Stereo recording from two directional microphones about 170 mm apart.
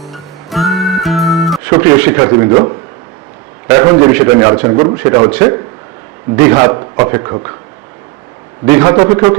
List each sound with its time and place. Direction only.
0.0 s music: centre (ahead or behind)
1.6 s a man's voice: 15° right (ahead or behind)
8.6 s a man's voice: 20° right (ahead or behind)